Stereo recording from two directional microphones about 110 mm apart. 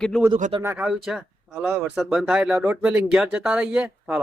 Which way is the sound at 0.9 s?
5° right (ahead or behind).